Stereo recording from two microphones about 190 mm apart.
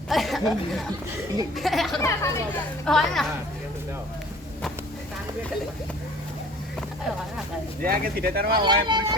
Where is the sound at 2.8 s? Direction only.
Centre (ahead or behind).